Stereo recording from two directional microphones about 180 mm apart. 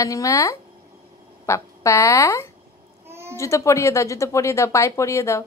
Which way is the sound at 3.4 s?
15° left (ahead or behind).